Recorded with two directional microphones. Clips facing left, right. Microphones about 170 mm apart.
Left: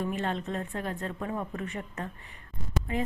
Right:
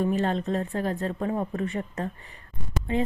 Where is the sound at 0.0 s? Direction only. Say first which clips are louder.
Right 6 dB; 35° right (ahead or behind).